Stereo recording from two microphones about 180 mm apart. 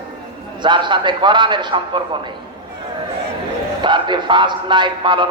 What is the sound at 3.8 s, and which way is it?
A man's voice, 25° right (ahead or behind).